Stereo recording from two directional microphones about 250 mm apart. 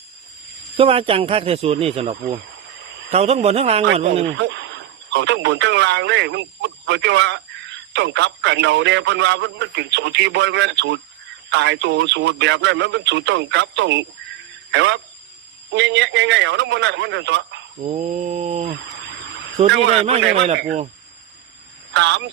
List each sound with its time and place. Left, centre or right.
0.8 s speech: right
2.5 s a sound: right
3.1 s speech: right
4.4 s speech: right
17.8 s speech: right
19.6 s speech: right
21.9 s speech: right